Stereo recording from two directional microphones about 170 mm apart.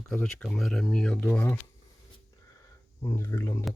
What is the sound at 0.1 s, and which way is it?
Speech, 5° left (ahead or behind).